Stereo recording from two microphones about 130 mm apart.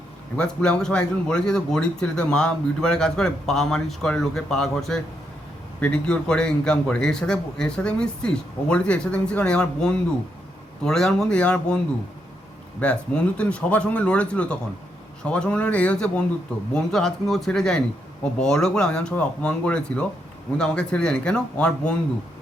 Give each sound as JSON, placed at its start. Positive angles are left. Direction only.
{"t": 0.3, "sound": "speech", "side_deg": 5}
{"t": 12.8, "sound": "speech", "side_deg": 10}